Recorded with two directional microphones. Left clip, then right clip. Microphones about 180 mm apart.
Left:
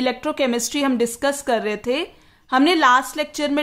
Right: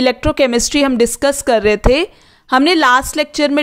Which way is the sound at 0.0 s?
40° right (ahead or behind).